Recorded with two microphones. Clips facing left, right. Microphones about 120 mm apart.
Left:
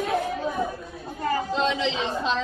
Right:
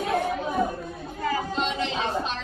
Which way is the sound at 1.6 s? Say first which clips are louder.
Left 2 dB; 90° left.